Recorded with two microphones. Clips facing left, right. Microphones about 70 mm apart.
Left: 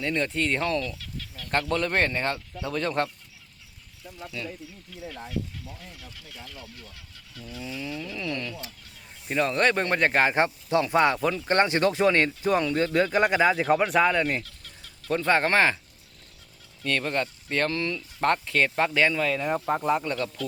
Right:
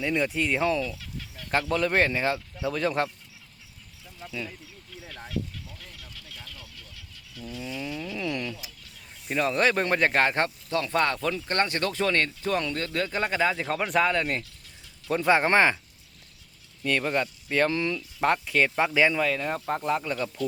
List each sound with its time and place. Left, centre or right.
0.0 s speech: centre
7.8 s speech: centre
9.2 s speech: centre
10.4 s speech: centre
15.2 s speech: centre
16.8 s speech: centre
19.3 s speech: centre
20.1 s speech: centre